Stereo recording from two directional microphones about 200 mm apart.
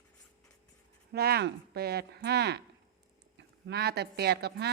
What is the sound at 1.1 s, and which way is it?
Speech, 50° right (ahead or behind).